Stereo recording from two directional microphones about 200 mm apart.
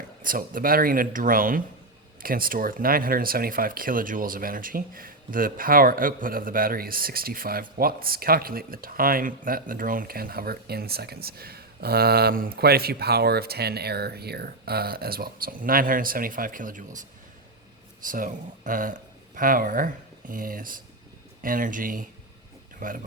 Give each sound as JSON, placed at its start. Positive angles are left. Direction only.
{"t": 0.2, "sound": "speech", "side_deg": -45}